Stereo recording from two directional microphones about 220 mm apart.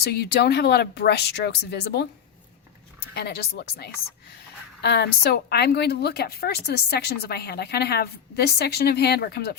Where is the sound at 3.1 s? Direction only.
45° left (ahead or behind).